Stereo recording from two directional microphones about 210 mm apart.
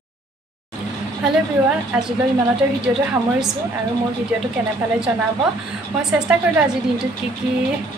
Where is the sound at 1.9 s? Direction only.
5° right (ahead or behind).